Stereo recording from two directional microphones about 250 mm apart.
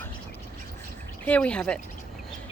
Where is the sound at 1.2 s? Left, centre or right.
Centre.